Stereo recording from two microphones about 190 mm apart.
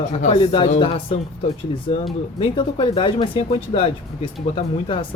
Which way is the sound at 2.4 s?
25° left (ahead or behind).